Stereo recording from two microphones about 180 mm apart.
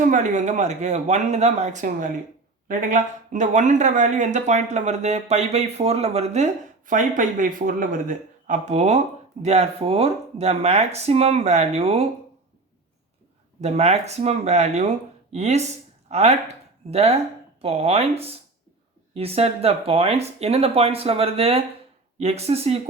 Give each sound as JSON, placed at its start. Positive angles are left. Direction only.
{"t": 0.1, "sound": "speech", "side_deg": -45}
{"t": 13.6, "sound": "speech", "side_deg": -35}